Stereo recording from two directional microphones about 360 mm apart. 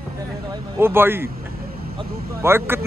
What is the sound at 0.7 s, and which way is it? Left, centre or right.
Speech, centre.